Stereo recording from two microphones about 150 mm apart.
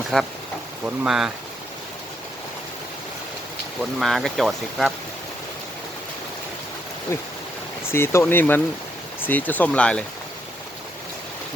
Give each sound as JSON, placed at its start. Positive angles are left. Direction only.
{"t": 0.1, "sound": "speech", "side_deg": 0}
{"t": 4.0, "sound": "speech", "side_deg": 0}
{"t": 7.1, "sound": "speech", "side_deg": 15}